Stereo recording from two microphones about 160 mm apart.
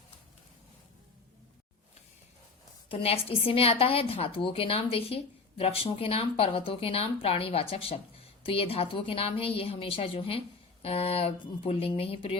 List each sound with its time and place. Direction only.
2.9 s a woman's voice: 35° left (ahead or behind)